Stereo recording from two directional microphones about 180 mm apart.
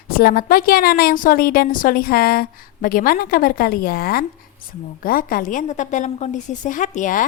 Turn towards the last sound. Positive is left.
turn(degrees=45)  # may be behind; listen again after turning